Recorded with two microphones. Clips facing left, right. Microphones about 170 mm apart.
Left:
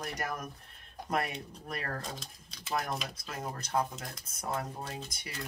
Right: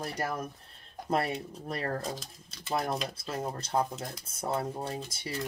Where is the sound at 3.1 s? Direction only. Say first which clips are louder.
Right 5 dB; 25° right (ahead or behind).